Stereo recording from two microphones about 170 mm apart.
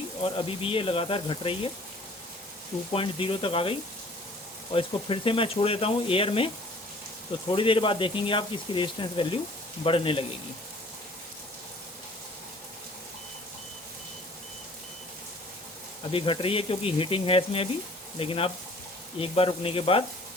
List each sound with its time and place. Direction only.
0.2 s speech: 30° left (ahead or behind)
2.9 s speech: 30° left (ahead or behind)
7.5 s speech: 30° left (ahead or behind)
16.1 s speech: 30° left (ahead or behind)